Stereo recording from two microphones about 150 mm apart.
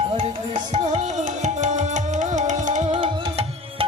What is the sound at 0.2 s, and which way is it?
Tabla, 45° right (ahead or behind).